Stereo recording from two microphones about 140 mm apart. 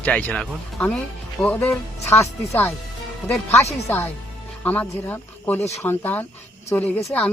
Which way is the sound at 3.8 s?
15° left (ahead or behind).